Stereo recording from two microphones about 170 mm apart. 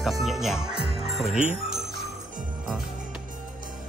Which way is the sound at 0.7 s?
30° right (ahead or behind).